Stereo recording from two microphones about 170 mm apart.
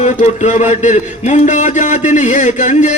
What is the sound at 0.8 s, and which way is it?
A man's voice, 45° left (ahead or behind).